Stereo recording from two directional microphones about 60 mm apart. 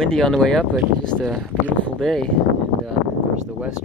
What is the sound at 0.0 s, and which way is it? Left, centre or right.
Speech, centre.